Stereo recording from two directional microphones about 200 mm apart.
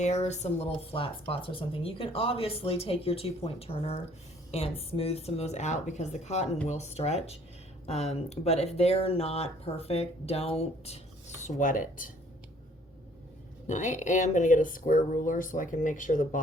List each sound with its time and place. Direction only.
0.0 s speech: 35° left (ahead or behind)
13.7 s speech: 35° left (ahead or behind)